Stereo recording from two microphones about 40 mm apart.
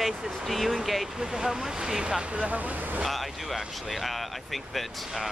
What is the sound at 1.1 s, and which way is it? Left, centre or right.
Speech, centre.